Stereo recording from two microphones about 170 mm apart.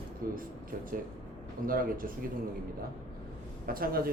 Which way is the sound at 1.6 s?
55° right (ahead or behind).